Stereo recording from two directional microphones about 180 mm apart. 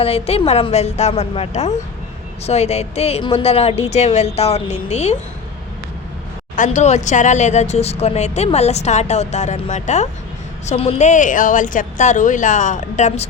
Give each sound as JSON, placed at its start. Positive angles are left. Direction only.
{"t": 0.0, "sound": "speech", "side_deg": 35}
{"t": 6.6, "sound": "a woman's voice", "side_deg": 40}